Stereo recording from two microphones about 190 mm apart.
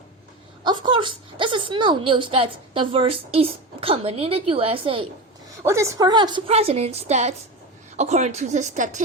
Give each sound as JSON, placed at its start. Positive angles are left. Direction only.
{"t": 0.6, "sound": "a woman's voice", "side_deg": -25}
{"t": 5.6, "sound": "a woman's voice", "side_deg": -15}